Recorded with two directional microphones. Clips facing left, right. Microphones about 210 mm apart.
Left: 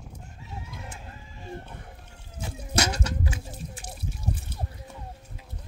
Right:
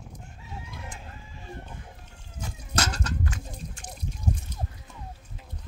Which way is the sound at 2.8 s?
10° left (ahead or behind).